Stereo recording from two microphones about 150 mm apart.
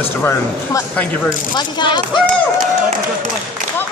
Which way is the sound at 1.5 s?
30° left (ahead or behind).